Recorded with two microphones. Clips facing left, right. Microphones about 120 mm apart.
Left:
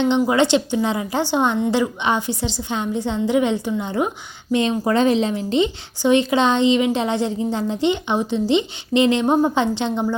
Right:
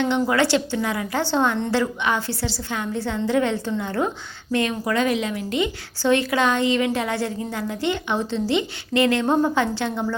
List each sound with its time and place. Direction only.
0.0 s a woman's voice: 20° left (ahead or behind)